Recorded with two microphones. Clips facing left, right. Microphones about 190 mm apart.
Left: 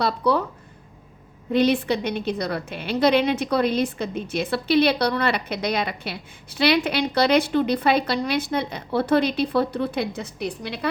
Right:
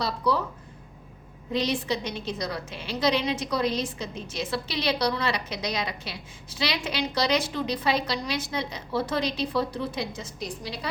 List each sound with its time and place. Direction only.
0.0 s a woman's voice: 60° left (ahead or behind)
1.5 s a woman's voice: 60° left (ahead or behind)